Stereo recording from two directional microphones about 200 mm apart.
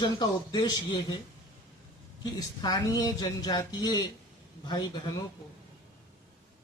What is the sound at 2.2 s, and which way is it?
Speech, 20° left (ahead or behind).